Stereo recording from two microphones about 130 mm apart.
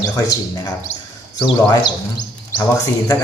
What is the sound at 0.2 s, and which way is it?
Speech, 30° left (ahead or behind).